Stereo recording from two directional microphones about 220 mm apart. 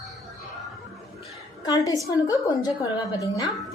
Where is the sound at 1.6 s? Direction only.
15° left (ahead or behind).